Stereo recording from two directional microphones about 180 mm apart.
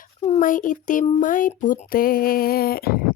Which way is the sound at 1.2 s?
50° left (ahead or behind).